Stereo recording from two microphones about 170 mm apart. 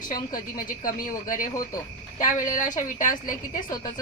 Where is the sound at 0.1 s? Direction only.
25° left (ahead or behind).